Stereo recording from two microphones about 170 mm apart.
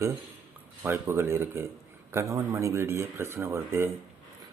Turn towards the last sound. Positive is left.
turn(degrees=-15)  # may be behind; listen again after turning